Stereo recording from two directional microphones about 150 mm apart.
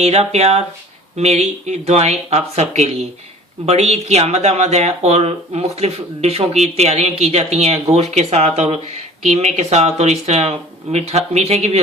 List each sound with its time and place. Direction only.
0.0 s speech: 45° right (ahead or behind)